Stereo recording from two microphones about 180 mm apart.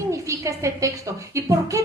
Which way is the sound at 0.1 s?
15° right (ahead or behind).